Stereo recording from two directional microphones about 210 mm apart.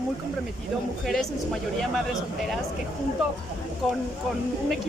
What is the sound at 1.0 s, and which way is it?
Speech, centre (ahead or behind).